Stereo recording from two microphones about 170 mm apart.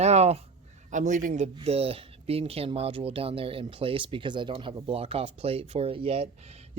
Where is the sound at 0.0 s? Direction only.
40° right (ahead or behind).